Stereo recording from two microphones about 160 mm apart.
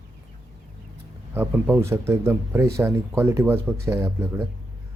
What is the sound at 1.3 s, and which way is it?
Speech, 10° right (ahead or behind).